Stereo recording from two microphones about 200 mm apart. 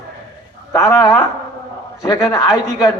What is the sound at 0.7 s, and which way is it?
A man's voice, 15° left (ahead or behind).